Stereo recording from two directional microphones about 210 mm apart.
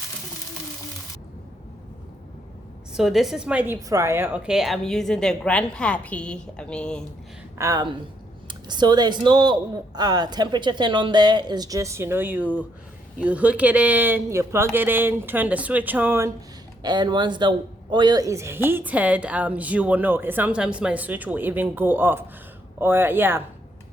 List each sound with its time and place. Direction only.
2.9 s a woman's voice: centre (ahead or behind)
7.6 s a woman's voice: 20° right (ahead or behind)